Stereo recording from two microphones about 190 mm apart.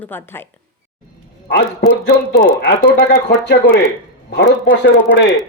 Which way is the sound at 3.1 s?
60° left (ahead or behind).